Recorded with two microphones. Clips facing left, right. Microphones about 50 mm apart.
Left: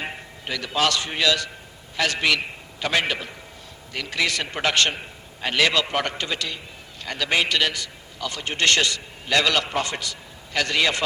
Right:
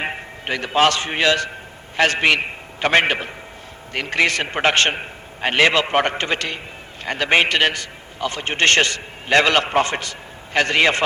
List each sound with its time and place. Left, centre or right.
0.0 s a man's voice: right